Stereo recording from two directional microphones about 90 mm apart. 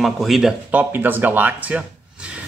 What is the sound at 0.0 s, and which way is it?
Speech, centre (ahead or behind).